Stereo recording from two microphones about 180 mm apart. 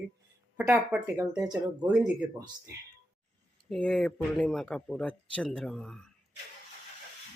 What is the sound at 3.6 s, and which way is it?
Speech, 5° left (ahead or behind).